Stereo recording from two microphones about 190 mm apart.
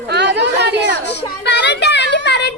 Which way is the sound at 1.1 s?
65° left (ahead or behind).